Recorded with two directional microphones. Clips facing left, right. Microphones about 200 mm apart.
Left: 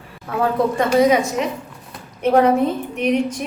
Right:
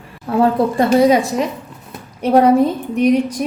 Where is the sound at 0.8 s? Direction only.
35° right (ahead or behind).